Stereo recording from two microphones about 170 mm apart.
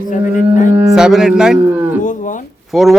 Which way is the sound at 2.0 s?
50° left (ahead or behind).